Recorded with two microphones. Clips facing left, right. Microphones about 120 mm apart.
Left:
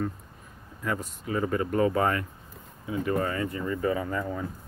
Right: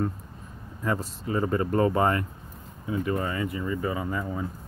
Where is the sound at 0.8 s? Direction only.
35° right (ahead or behind).